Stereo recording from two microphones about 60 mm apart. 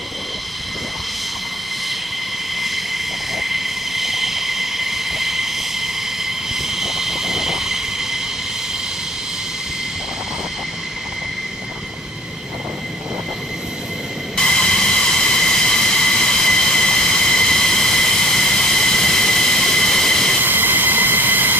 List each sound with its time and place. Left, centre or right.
2.6 s vehicle: centre
14.3 s vehicle: centre
20.4 s vehicle: right